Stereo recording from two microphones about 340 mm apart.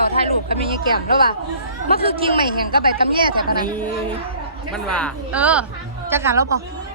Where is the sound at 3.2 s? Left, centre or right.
Centre.